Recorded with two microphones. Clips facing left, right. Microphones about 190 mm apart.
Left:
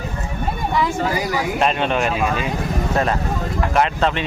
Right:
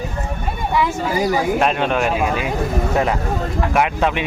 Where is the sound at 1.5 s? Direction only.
5° right (ahead or behind).